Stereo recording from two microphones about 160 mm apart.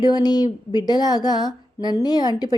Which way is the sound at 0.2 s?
25° left (ahead or behind).